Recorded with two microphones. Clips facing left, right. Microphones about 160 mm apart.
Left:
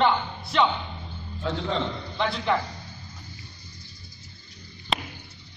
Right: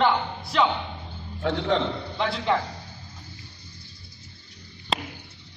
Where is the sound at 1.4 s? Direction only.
75° right (ahead or behind).